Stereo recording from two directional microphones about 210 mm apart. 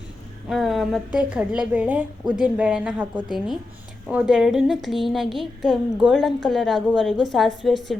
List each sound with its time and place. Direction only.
0.4 s a woman's voice: centre (ahead or behind)